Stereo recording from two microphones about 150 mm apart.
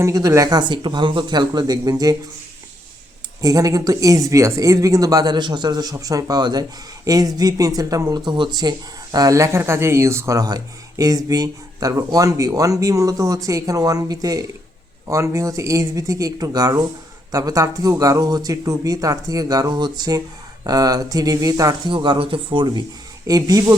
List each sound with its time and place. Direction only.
0.0 s speech: 20° right (ahead or behind)
3.4 s speech: 25° right (ahead or behind)